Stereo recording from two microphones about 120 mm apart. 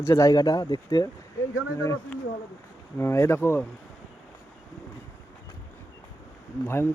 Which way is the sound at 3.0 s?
20° left (ahead or behind).